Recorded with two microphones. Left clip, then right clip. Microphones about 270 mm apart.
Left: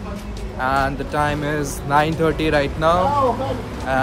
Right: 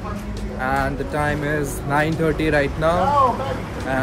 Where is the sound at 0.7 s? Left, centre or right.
Centre.